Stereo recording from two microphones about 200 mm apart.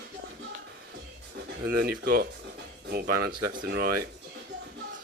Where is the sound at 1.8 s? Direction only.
50° right (ahead or behind).